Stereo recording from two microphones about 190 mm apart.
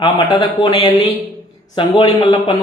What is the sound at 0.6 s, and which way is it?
A man's voice, 25° left (ahead or behind).